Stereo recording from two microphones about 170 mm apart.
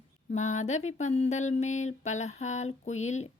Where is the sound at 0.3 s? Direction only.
45° left (ahead or behind).